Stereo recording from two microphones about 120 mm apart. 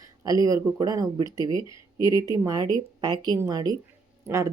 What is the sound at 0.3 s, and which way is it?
A woman's voice, 30° right (ahead or behind).